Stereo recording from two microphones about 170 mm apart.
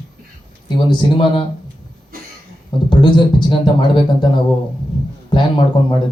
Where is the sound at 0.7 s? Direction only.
25° left (ahead or behind).